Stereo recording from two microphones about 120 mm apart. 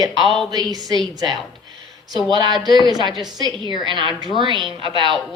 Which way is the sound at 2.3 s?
35° right (ahead or behind).